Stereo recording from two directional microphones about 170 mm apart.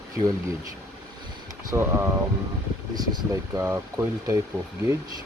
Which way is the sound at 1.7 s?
15° right (ahead or behind).